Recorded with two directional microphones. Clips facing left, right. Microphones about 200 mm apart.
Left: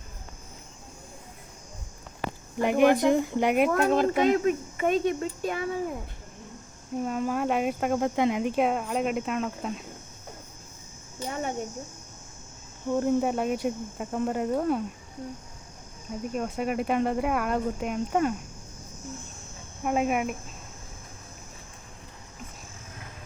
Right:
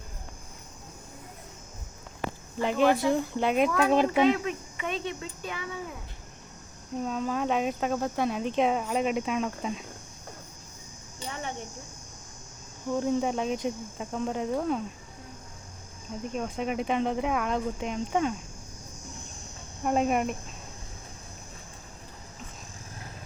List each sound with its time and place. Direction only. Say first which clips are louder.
2.6 s speech: left 3 dB; 15° left (ahead or behind)
4.1 s speech: left 1 dB; 45° left (ahead or behind)
7.0 s speech: left 2 dB; 10° left (ahead or behind)
11.2 s speech: left 5 dB; 45° left (ahead or behind)
12.9 s speech: left 2 dB; 5° left (ahead or behind)
16.0 s speech: left 2 dB; 5° left (ahead or behind)
19.8 s speech: even; 5° left (ahead or behind)